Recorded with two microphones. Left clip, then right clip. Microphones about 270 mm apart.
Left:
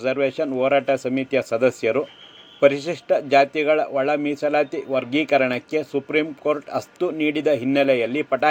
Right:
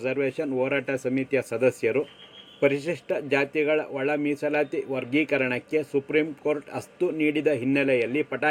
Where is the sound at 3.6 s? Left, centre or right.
Left.